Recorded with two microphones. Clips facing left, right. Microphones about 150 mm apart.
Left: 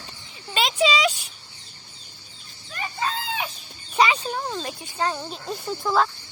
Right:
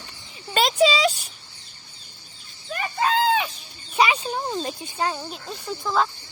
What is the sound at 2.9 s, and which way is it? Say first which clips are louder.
Chicken: right 8 dB; 85° right.